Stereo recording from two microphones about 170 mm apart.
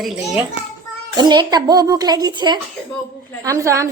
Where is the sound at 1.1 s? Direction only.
25° right (ahead or behind).